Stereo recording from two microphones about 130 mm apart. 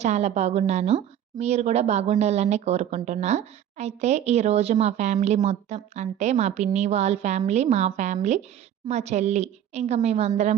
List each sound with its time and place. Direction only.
0.0 s a woman's voice: 60° right (ahead or behind)